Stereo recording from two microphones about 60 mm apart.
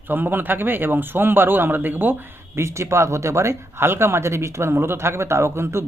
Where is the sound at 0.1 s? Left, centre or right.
Right.